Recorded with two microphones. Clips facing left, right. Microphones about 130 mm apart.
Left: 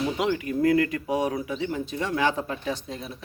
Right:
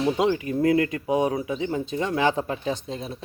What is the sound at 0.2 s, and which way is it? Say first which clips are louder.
Speech: right 2 dB; 25° right (ahead or behind).